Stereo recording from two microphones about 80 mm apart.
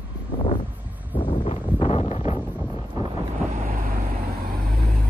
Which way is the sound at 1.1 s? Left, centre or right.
Left.